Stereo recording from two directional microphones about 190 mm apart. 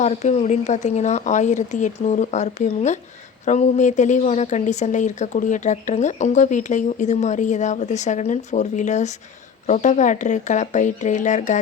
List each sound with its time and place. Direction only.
0.0 s speech: 35° left (ahead or behind)